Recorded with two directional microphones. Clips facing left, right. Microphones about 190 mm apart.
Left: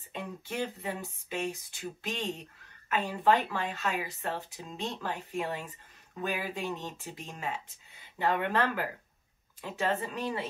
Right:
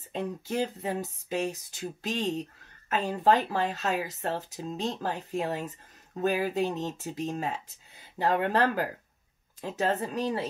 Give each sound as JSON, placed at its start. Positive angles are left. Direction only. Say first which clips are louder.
{"t": 0.1, "sound": "speech", "louder": "right 6 dB", "side_deg": -40}